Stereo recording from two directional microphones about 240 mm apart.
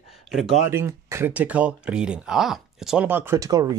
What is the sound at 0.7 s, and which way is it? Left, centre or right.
Speech, centre.